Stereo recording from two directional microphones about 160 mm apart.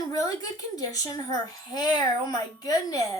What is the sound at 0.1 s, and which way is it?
Speech, 20° left (ahead or behind).